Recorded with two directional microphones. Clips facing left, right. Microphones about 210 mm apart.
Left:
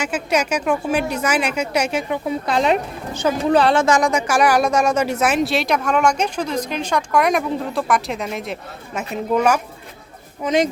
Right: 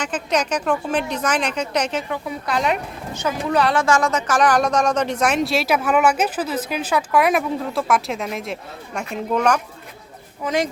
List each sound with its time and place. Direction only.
0.0 s speech: 10° left (ahead or behind)
2.1 s a woman's voice: 25° left (ahead or behind); by 9.6 s 5° left (ahead or behind)
10.4 s a woman's voice: 20° left (ahead or behind)